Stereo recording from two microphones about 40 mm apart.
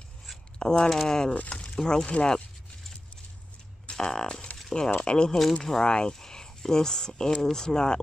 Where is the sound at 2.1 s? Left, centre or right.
Left.